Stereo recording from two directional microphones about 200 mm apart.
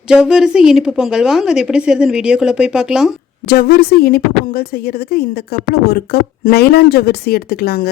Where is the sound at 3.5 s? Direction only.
50° left (ahead or behind).